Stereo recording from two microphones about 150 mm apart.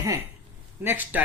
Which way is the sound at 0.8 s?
10° right (ahead or behind).